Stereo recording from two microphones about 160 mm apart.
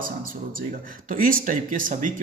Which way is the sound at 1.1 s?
60° right (ahead or behind).